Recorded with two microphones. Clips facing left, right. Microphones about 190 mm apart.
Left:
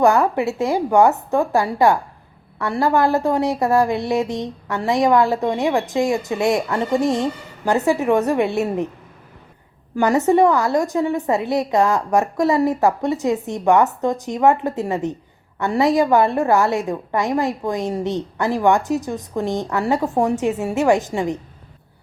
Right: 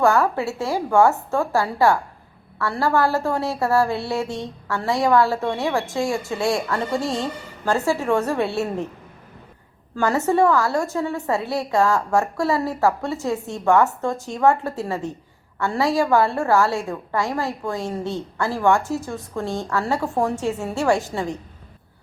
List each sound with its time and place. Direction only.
0.0 s a woman's voice: 20° left (ahead or behind)
9.9 s a woman's voice: 15° left (ahead or behind)